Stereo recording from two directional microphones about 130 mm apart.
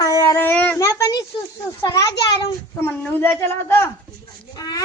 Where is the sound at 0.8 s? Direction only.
25° left (ahead or behind).